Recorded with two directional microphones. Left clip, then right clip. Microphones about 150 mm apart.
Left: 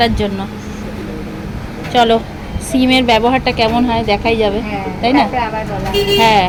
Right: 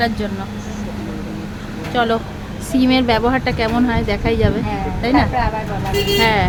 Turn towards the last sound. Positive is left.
turn(degrees=0)  # may be behind; listen again after turning